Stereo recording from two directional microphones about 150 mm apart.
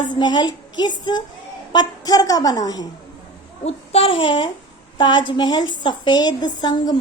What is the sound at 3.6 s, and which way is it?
Child singing, 40° left (ahead or behind).